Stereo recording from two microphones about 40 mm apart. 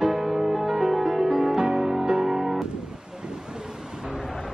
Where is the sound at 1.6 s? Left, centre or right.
Centre.